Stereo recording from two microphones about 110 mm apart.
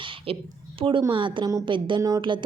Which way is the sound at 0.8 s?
55° right (ahead or behind).